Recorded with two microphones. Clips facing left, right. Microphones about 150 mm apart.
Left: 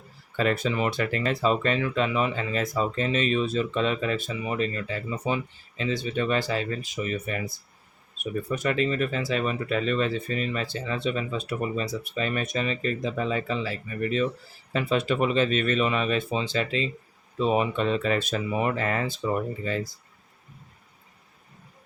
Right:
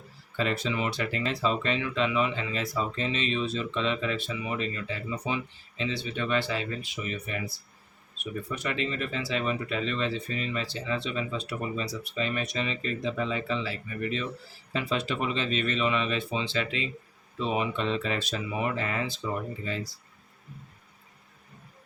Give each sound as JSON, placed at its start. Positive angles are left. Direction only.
{"t": 0.3, "sound": "speech", "side_deg": 50}